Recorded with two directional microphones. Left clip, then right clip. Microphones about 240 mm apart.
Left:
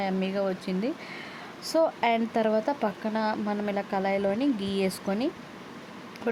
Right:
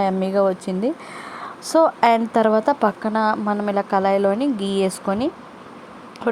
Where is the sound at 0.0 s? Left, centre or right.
Centre.